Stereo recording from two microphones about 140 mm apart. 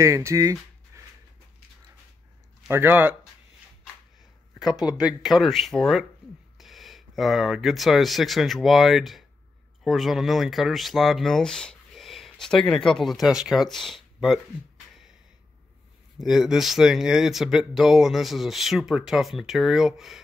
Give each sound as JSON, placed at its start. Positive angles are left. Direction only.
{"t": 0.0, "sound": "speech", "side_deg": -20}
{"t": 2.7, "sound": "speech", "side_deg": -15}
{"t": 3.8, "sound": "speech", "side_deg": -5}
{"t": 16.2, "sound": "speech", "side_deg": 0}